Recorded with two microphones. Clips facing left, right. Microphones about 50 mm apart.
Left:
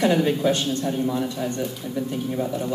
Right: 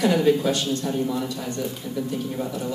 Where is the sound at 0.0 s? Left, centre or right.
Left.